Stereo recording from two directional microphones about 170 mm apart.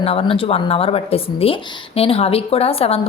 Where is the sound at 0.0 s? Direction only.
35° left (ahead or behind).